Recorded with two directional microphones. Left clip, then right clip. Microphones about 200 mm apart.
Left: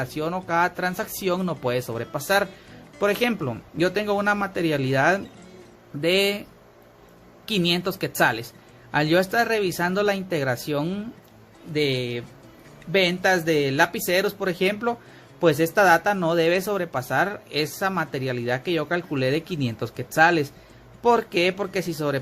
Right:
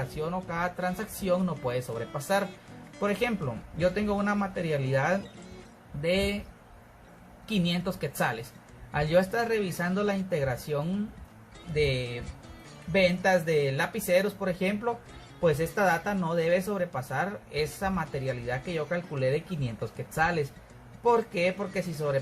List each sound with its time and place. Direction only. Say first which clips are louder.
0.2 s speech: left 9 dB; 50° left (ahead or behind)
7.4 s speech: left 8 dB; 45° left (ahead or behind)